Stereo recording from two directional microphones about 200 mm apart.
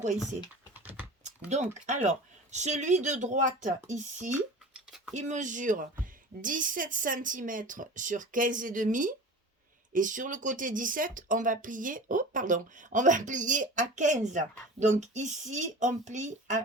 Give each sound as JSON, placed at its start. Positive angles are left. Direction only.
{"t": 1.5, "sound": "speech", "side_deg": -35}